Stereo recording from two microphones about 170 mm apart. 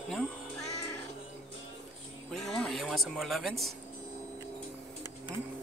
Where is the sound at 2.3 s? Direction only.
5° left (ahead or behind).